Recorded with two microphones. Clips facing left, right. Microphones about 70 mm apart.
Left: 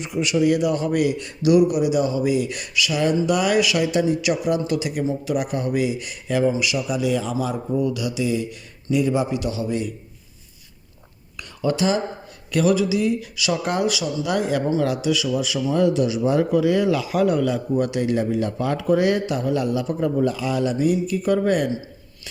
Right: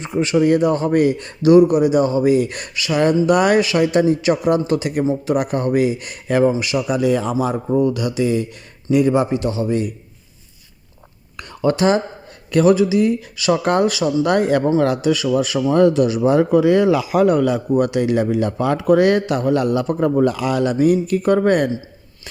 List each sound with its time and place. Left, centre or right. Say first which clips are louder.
0.0 s a man's voice: right 4 dB; right
11.3 s a sound: right 4 dB; right
12.5 s speech: right 5 dB; right
20.7 s speech: right 5 dB; right